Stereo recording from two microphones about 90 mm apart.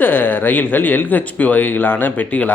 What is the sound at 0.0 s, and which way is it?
Speech, 20° left (ahead or behind).